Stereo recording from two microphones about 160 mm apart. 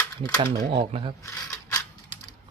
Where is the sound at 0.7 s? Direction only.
35° right (ahead or behind).